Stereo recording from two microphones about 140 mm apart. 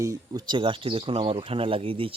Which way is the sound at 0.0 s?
25° right (ahead or behind).